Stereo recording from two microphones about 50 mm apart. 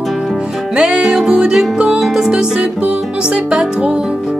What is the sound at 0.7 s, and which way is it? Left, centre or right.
Music, centre.